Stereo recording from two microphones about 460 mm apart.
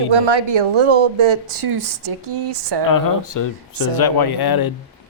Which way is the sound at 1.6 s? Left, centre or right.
Right.